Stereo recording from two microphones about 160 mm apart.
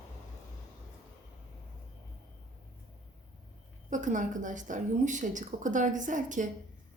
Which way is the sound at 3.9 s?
50° right (ahead or behind).